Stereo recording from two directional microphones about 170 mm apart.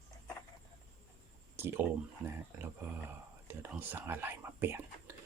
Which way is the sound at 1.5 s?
15° right (ahead or behind).